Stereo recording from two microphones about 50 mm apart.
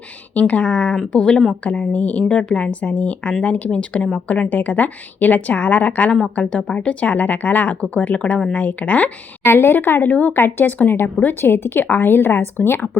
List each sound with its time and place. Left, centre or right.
0.3 s speech: left
1.1 s speech: centre
1.6 s a woman's voice: left
6.3 s a woman's voice: left
9.4 s speech: left
10.3 s speech: left